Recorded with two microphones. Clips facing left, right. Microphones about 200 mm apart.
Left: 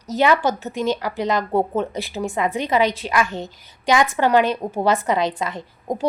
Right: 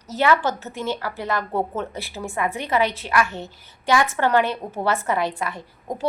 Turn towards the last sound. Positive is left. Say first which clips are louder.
# left 5 dB
turn(degrees=20)  # may be behind; listen again after turning